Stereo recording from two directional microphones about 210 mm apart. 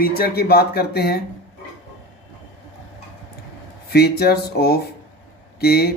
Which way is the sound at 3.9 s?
50° left (ahead or behind).